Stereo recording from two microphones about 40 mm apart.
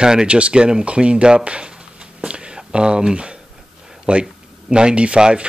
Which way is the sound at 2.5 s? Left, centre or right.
Right.